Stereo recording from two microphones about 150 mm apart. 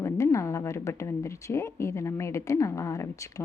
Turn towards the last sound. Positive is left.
turn(degrees=20)  # may be behind; listen again after turning